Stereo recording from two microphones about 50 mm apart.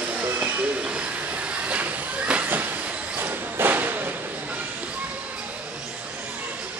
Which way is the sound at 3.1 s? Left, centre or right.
Right.